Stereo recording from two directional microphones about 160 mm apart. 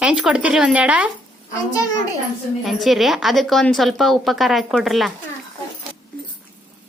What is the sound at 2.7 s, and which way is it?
A woman's voice, centre (ahead or behind).